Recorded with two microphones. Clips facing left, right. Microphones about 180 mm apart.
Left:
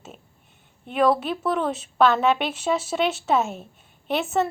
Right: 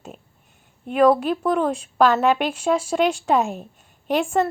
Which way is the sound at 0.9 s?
10° right (ahead or behind).